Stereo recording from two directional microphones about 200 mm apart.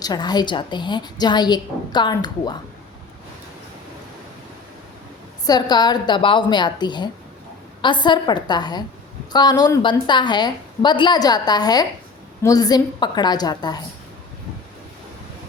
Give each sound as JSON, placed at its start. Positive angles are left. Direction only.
{"t": 0.0, "sound": "a woman's voice", "side_deg": 20}
{"t": 5.5, "sound": "a woman's voice", "side_deg": 20}